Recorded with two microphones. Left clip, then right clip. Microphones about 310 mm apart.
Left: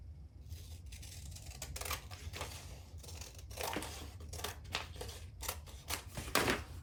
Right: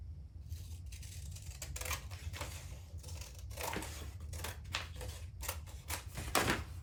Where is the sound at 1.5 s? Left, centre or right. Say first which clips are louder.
Even; centre.